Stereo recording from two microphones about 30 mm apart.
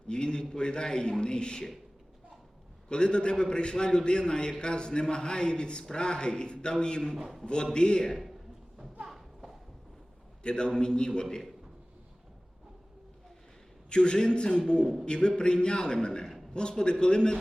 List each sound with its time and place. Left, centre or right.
0.1 s a man's voice: left
2.9 s a man's voice: left
8.1 s a sound: centre
10.4 s a man's voice: left
13.9 s a man's voice: left